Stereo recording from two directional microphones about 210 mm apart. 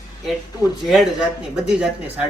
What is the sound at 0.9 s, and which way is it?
Speech, centre (ahead or behind).